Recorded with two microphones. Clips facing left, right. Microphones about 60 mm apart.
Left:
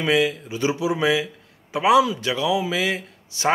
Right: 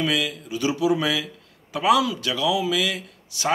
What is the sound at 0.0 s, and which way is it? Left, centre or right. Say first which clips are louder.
A man's voice: left 4 dB; left.